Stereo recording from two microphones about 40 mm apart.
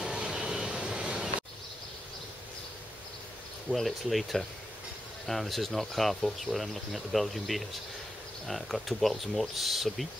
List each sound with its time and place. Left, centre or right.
0.0 s vehicle: centre
3.6 s speech: centre